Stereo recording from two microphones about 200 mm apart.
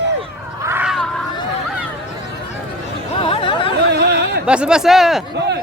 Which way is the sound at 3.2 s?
25° left (ahead or behind).